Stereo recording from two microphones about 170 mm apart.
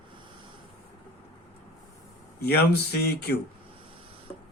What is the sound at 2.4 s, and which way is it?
Speech, 70° left (ahead or behind).